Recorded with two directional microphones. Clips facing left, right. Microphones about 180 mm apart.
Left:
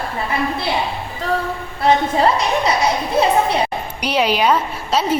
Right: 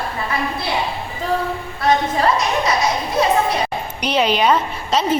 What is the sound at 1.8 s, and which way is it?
Speech, 30° left (ahead or behind).